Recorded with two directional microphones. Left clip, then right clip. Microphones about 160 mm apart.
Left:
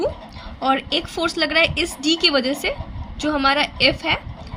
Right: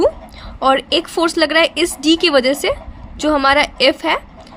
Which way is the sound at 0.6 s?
50° right (ahead or behind).